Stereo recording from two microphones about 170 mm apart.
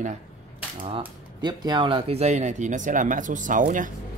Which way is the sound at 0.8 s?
30° right (ahead or behind).